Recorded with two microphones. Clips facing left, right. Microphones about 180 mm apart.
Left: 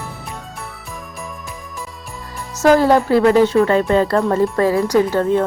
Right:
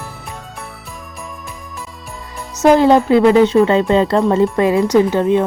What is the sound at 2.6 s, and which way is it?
A woman's voice, 20° right (ahead or behind).